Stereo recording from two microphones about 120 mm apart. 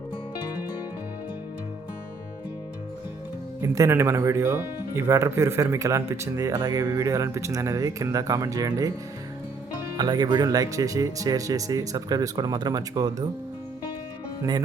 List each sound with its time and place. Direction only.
3.6 s speech: 25° right (ahead or behind)
10.0 s speech: 35° right (ahead or behind)